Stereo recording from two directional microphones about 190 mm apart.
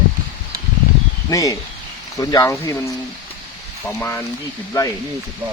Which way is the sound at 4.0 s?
15° left (ahead or behind).